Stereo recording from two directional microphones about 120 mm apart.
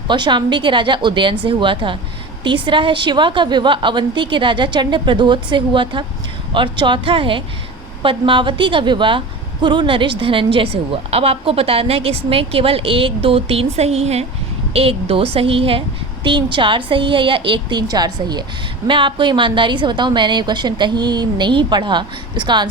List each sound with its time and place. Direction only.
0.1 s a woman's voice: 40° right (ahead or behind)